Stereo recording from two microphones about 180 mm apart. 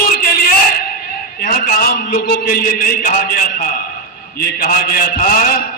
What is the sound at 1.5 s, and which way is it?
A man's voice, 55° left (ahead or behind).